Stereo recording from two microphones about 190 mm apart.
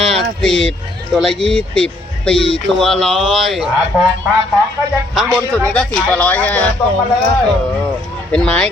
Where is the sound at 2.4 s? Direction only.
30° left (ahead or behind).